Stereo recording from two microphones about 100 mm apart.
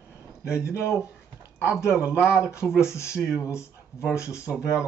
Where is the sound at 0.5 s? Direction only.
30° left (ahead or behind).